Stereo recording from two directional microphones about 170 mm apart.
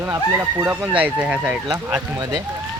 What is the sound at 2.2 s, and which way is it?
Speech, 25° right (ahead or behind).